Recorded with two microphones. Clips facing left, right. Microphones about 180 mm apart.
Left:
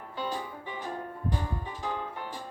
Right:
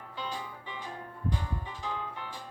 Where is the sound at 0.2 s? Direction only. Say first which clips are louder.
Left 5 dB; 45° left (ahead or behind).